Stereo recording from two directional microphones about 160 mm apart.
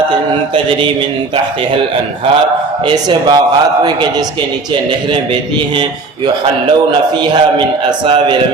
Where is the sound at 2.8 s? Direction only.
25° right (ahead or behind).